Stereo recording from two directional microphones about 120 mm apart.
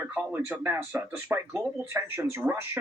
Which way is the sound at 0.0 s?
15° right (ahead or behind).